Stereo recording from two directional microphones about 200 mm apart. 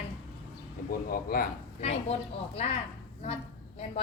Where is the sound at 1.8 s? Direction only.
30° left (ahead or behind).